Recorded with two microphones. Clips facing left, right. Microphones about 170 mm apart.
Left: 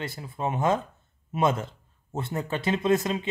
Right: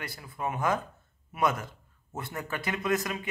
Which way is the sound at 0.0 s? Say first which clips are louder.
Left 4 dB; 25° left (ahead or behind).